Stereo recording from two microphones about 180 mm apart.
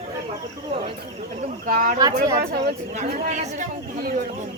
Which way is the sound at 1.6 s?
50° right (ahead or behind).